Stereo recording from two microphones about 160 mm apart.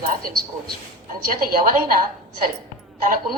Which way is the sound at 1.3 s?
60° right (ahead or behind).